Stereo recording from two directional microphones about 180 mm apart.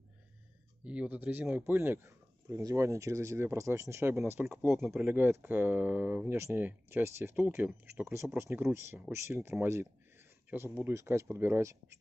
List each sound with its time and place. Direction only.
0.8 s speech: 10° right (ahead or behind)